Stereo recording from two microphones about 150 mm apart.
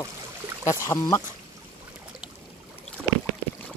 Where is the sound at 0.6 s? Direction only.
20° left (ahead or behind).